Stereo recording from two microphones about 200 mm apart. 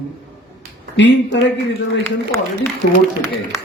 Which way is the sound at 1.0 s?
60° left (ahead or behind).